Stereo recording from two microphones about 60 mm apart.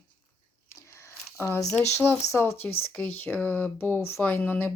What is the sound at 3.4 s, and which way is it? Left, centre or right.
Speech, left.